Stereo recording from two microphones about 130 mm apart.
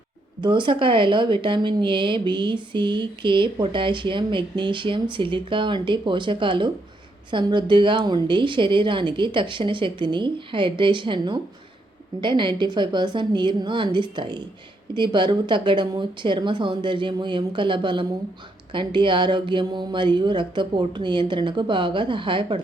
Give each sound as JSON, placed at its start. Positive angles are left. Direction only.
{"t": 0.4, "sound": "speech", "side_deg": -40}